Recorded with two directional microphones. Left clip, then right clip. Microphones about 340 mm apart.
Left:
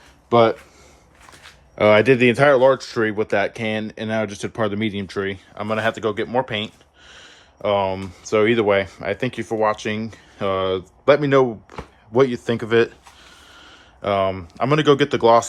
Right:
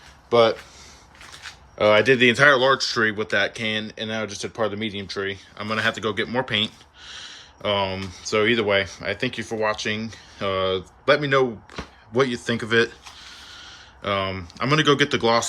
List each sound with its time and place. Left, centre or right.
0.3 s speech: left
1.8 s speech: centre